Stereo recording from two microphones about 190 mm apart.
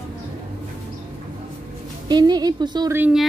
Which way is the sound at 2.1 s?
20° right (ahead or behind).